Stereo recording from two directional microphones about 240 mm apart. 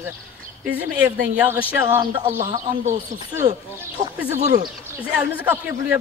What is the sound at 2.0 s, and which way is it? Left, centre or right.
Speech, centre.